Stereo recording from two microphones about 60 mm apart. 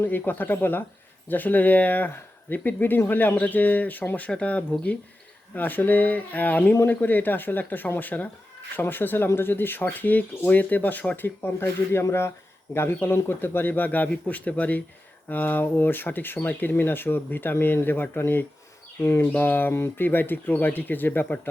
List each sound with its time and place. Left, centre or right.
0.0 s speech: left
12.7 s speech: left